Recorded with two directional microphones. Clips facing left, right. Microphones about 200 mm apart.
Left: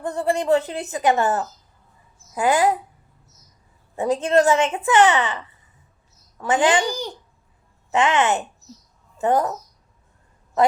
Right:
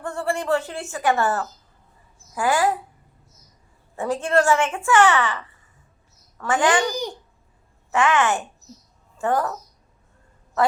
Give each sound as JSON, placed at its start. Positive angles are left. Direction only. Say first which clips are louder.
{"t": 0.0, "sound": "speech", "louder": "left 3 dB", "side_deg": 20}
{"t": 3.9, "sound": "speech", "louder": "left 3 dB", "side_deg": 20}
{"t": 10.6, "sound": "speech", "louder": "left 3 dB", "side_deg": 20}